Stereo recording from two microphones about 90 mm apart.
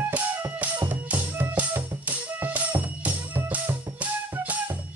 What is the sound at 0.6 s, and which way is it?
Music, 20° right (ahead or behind).